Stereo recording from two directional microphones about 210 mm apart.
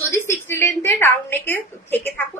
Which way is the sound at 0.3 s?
10° left (ahead or behind).